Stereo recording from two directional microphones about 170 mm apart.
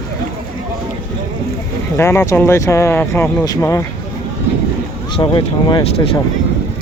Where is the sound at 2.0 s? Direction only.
15° left (ahead or behind).